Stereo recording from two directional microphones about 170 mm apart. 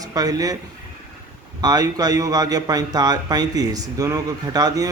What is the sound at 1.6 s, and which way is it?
A man's voice, 20° right (ahead or behind).